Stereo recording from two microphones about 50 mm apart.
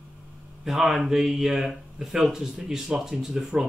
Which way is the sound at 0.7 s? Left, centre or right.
Centre.